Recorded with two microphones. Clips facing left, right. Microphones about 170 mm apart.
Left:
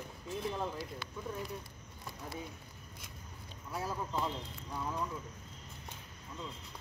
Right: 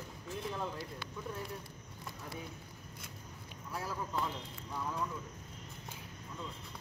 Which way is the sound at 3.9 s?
20° left (ahead or behind).